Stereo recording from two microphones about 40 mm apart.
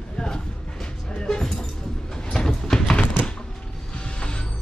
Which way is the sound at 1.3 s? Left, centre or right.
Centre.